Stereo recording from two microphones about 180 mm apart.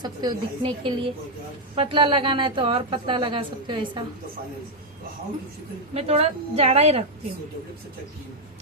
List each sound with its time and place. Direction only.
0.0 s a woman's voice: 25° right (ahead or behind)
5.9 s a woman's voice: 35° right (ahead or behind)